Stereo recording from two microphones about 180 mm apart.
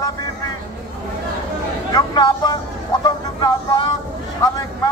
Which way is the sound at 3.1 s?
25° left (ahead or behind).